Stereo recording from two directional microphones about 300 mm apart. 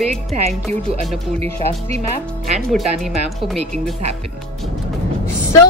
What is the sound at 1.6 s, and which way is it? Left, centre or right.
Speech, right.